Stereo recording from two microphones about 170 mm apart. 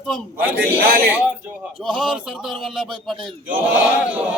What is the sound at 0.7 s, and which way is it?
Speech, 60° right (ahead or behind).